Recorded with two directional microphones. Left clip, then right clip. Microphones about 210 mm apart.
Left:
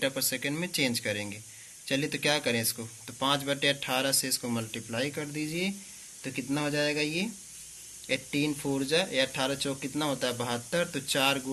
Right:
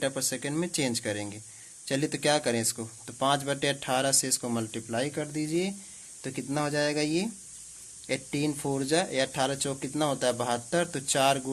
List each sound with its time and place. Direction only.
0.0 s speech: 50° right (ahead or behind)